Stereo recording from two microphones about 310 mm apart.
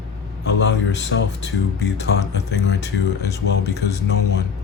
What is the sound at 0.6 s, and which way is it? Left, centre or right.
Speech, left.